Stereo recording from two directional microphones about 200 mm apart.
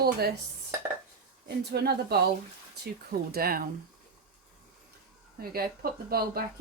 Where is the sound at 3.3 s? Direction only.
50° right (ahead or behind).